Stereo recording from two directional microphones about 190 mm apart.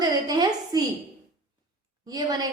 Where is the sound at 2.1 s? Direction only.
20° right (ahead or behind).